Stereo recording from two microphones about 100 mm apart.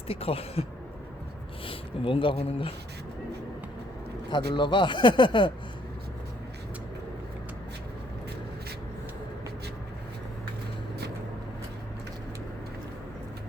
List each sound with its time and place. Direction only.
0.1 s speech: 75° left (ahead or behind)
1.6 s speech: 60° left (ahead or behind); by 2.7 s 80° left
4.3 s speech: 50° left (ahead or behind)